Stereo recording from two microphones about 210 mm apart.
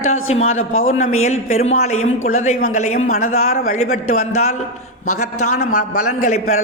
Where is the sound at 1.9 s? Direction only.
85° left.